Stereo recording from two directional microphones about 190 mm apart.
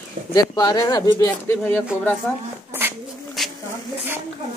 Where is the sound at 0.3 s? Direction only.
20° left (ahead or behind).